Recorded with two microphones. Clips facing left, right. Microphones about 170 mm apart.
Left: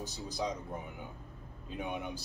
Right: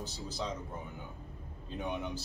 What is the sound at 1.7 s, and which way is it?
Speech, 10° left (ahead or behind).